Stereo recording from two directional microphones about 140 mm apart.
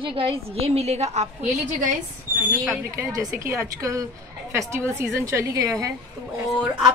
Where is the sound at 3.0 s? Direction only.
20° right (ahead or behind).